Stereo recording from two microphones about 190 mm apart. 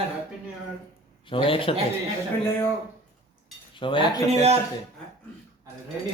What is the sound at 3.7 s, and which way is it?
Speech, 25° left (ahead or behind).